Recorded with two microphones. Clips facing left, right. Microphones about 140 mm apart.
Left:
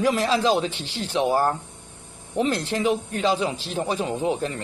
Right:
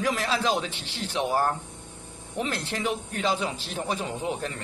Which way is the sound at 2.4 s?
30° left (ahead or behind).